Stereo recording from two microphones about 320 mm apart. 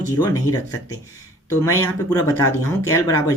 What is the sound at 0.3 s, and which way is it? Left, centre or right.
Speech, centre.